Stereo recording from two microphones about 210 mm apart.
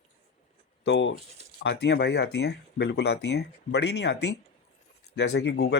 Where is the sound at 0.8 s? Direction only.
60° left (ahead or behind).